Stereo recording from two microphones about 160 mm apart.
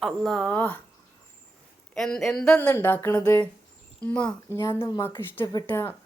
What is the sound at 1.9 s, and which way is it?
Speech, 5° left (ahead or behind).